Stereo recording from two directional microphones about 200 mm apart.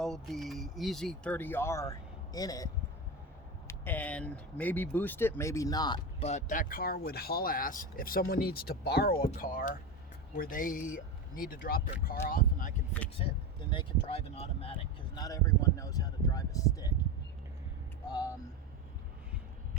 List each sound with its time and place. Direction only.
0.0 s speech: centre (ahead or behind); by 2.6 s 20° left (ahead or behind)
3.7 s speech: 10° left (ahead or behind)
6.2 s speech: 35° left (ahead or behind)
13.1 s speech: 25° left (ahead or behind)
18.1 s speech: 20° left (ahead or behind)